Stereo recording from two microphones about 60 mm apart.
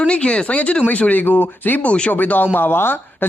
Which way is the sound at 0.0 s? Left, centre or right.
Centre.